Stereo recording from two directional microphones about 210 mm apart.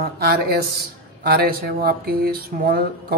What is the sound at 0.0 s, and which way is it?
A man's voice, 45° right (ahead or behind).